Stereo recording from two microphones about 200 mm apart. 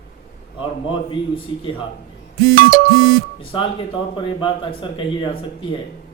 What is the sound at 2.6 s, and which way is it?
Music, 45° right (ahead or behind).